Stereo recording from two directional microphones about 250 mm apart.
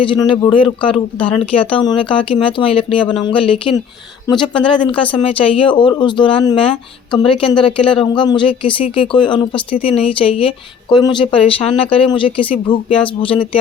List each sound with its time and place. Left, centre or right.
0.0 s speech: centre